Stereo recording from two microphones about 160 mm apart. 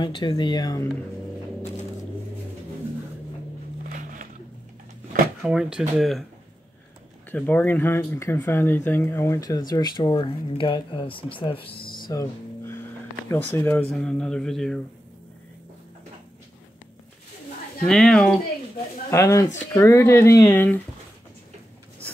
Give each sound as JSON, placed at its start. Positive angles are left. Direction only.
{"t": 0.0, "sound": "speech", "side_deg": 30}
{"t": 3.9, "sound": "a sound", "side_deg": -55}
{"t": 5.4, "sound": "speech", "side_deg": -5}
{"t": 7.2, "sound": "speech", "side_deg": 10}
{"t": 12.1, "sound": "music", "side_deg": 15}
{"t": 13.3, "sound": "speech", "side_deg": 15}
{"t": 17.8, "sound": "speech", "side_deg": 5}
{"t": 19.0, "sound": "speech", "side_deg": 20}